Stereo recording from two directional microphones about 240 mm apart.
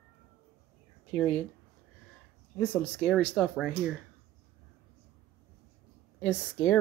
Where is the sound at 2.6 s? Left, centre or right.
Centre.